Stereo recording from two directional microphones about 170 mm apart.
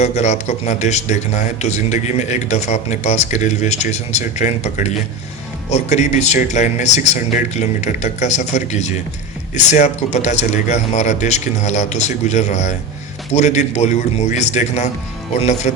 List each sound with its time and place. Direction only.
0.0 s a man's voice: 40° left (ahead or behind)